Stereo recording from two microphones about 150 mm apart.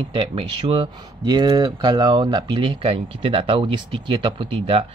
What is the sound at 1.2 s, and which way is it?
Speech, 25° right (ahead or behind).